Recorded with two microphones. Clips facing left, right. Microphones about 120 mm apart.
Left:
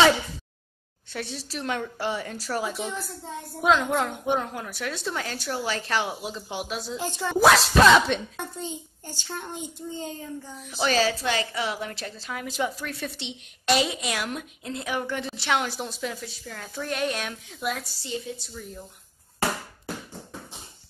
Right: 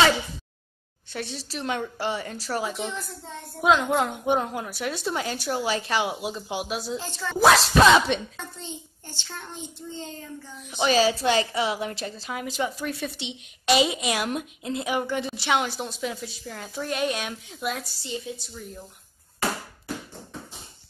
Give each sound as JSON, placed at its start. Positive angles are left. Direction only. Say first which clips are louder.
{"t": 1.1, "sound": "a woman's voice", "louder": "even", "side_deg": 0}
{"t": 3.6, "sound": "a woman's voice", "louder": "right 1 dB", "side_deg": -10}
{"t": 7.0, "sound": "a child's voice", "louder": "left 3 dB", "side_deg": 15}
{"t": 7.4, "sound": "a woman's voice", "louder": "even", "side_deg": 0}
{"t": 9.3, "sound": "a child's voice", "louder": "left 4 dB", "side_deg": 15}
{"t": 10.9, "sound": "a woman's voice", "louder": "right 3 dB", "side_deg": -15}